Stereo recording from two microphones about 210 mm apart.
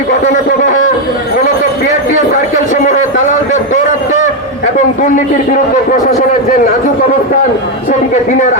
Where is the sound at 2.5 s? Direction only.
35° left (ahead or behind).